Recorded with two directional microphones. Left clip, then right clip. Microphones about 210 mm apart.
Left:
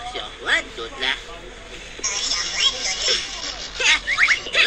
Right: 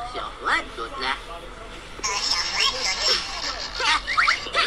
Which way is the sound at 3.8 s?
Centre (ahead or behind).